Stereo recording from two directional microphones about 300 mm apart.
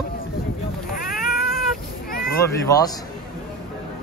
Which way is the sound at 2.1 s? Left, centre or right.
Left.